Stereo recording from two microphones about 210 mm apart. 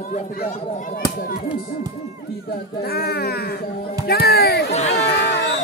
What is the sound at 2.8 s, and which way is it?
Speech, 50° left (ahead or behind).